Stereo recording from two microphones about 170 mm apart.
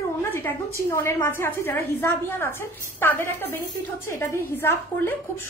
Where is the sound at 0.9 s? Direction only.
15° left (ahead or behind).